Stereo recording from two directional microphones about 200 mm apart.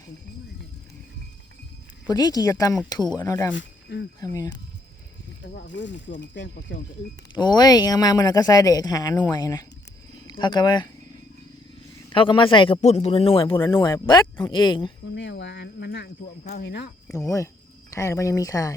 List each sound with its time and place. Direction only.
2.0 s speech: 20° left (ahead or behind)
3.5 s speech: 60° left (ahead or behind)
4.4 s speech: 20° left (ahead or behind)
5.5 s speech: 60° left (ahead or behind)
7.3 s speech: 20° left (ahead or behind)
12.1 s speech: 25° left (ahead or behind)
13.6 s speech: 15° left (ahead or behind)
15.1 s speech: 60° left (ahead or behind); by 16.6 s 45° left (ahead or behind)
16.6 s speech: 55° left (ahead or behind)
17.2 s speech: 15° left (ahead or behind)